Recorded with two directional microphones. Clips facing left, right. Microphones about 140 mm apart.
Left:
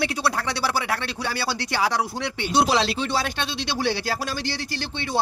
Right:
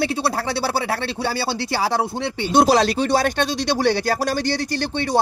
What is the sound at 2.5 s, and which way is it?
Speech, 45° right (ahead or behind).